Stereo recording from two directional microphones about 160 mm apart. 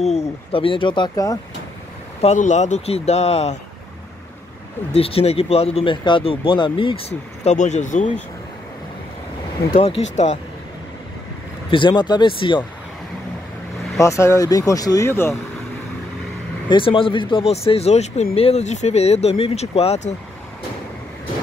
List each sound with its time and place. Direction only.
0.0 s speech: 45° left (ahead or behind); by 1.4 s 20° left (ahead or behind)
2.2 s speech: 50° left (ahead or behind)
4.9 s speech: 40° left (ahead or behind)
9.7 s speech: 45° left (ahead or behind)
11.7 s speech: 30° left (ahead or behind)
13.9 s speech: 20° left (ahead or behind)
16.6 s speech: 30° left (ahead or behind)